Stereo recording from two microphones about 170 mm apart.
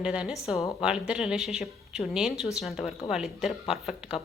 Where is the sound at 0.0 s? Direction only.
5° right (ahead or behind).